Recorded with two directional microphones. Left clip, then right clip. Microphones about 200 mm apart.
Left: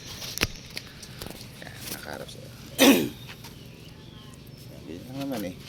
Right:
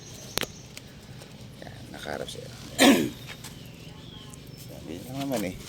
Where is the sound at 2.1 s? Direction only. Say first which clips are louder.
Right 6 dB; 30° right (ahead or behind).